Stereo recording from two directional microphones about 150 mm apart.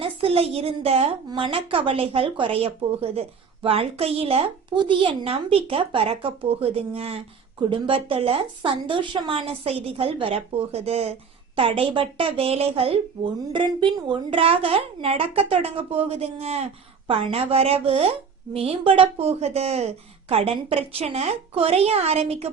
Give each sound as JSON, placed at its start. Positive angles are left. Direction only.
{"t": 0.0, "sound": "a woman's voice", "side_deg": -40}